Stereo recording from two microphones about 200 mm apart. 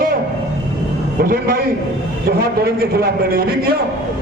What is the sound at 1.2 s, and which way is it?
A man's voice, 45° right (ahead or behind).